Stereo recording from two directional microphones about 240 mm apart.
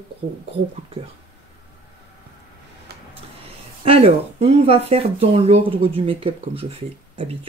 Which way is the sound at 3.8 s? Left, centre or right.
Right.